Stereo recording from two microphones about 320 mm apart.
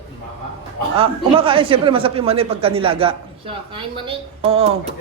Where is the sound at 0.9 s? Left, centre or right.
Centre.